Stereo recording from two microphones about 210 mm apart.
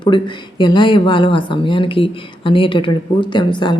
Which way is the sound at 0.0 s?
20° left (ahead or behind).